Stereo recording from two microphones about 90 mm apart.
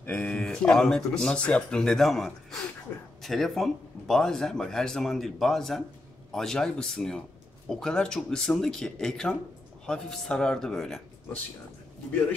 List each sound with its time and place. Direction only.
0.0 s a man's voice: 15° left (ahead or behind)